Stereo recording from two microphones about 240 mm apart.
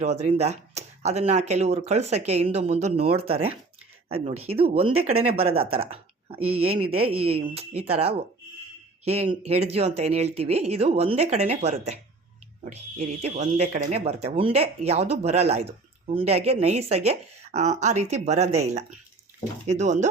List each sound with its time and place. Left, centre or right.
0.0 s speech: right